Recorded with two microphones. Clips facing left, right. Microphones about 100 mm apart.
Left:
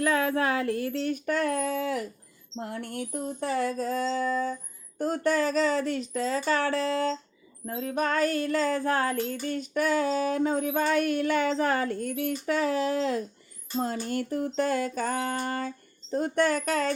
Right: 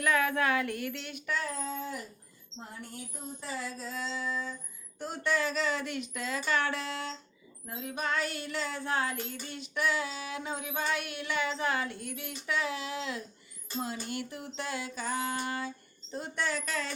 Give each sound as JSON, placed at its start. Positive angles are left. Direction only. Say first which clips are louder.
{"t": 0.0, "sound": "speech", "louder": "left 3 dB", "side_deg": 30}
{"t": 2.6, "sound": "child singing", "louder": "left 10 dB", "side_deg": 70}
{"t": 4.9, "sound": "speech", "louder": "left 6 dB", "side_deg": 45}
{"t": 7.7, "sound": "child singing", "louder": "left 6 dB", "side_deg": 45}